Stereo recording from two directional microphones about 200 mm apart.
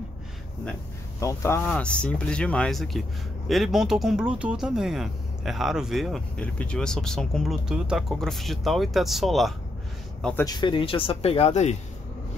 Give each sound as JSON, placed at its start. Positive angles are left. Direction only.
{"t": 1.2, "sound": "speech", "side_deg": 15}
{"t": 10.4, "sound": "speech", "side_deg": 20}